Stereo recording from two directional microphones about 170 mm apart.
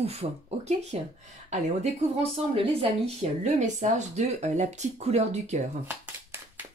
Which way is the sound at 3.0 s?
40° right (ahead or behind).